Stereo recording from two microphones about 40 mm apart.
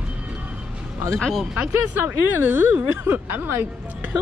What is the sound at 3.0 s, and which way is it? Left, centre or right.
Speech, right.